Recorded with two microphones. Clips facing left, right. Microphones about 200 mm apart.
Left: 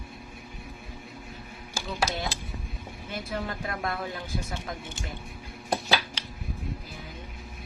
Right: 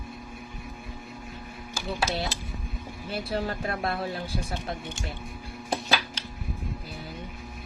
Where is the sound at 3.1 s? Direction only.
30° right (ahead or behind).